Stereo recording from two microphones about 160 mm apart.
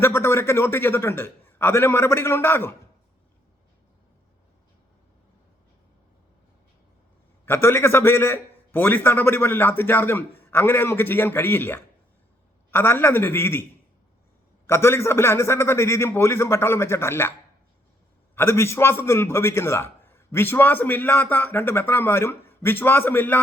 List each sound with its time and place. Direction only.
0.0 s a man's voice: 15° left (ahead or behind)
7.4 s a man's voice: 15° left (ahead or behind)
14.7 s a man's voice: 15° left (ahead or behind)
18.3 s a man's voice: 15° left (ahead or behind)